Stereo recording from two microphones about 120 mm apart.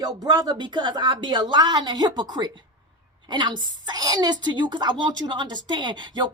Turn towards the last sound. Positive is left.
turn(degrees=-40)  # may be behind; listen again after turning